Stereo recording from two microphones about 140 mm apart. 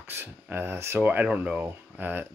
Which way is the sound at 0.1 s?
15° right (ahead or behind).